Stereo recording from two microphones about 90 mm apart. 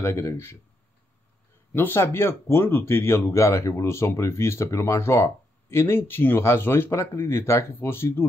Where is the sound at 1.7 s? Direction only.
25° left (ahead or behind).